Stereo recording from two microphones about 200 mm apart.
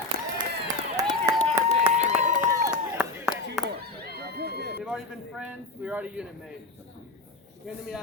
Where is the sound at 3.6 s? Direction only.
50° right (ahead or behind).